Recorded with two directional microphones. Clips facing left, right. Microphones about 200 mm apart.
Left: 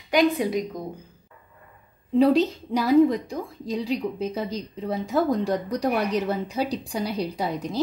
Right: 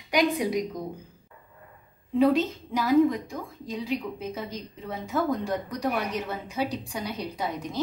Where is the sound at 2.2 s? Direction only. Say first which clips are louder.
Left 3 dB; 35° left (ahead or behind).